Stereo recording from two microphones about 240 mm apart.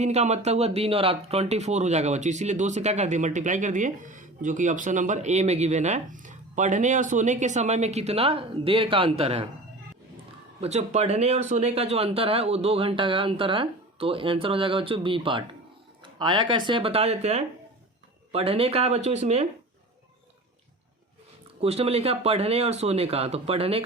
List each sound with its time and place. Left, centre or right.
0.0 s speech: right
10.6 s speech: right
21.6 s speech: right